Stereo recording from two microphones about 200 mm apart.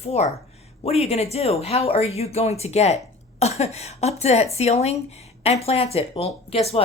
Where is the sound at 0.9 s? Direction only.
30° left (ahead or behind).